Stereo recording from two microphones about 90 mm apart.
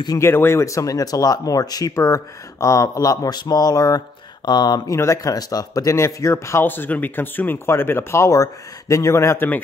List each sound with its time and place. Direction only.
0.2 s speech: 25° left (ahead or behind); by 4.9 s 50° left (ahead or behind)
4.9 s speech: 35° left (ahead or behind)
5.9 s speech: 30° left (ahead or behind)